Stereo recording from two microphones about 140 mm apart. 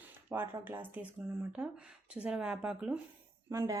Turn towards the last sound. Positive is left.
turn(degrees=-20)  # may be behind; listen again after turning